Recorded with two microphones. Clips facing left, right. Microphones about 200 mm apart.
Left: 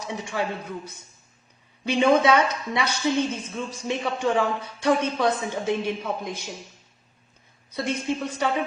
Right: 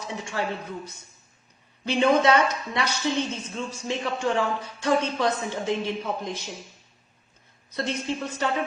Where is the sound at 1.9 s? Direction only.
15° left (ahead or behind).